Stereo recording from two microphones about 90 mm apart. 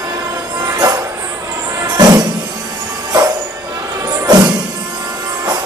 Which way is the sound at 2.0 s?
45° right (ahead or behind).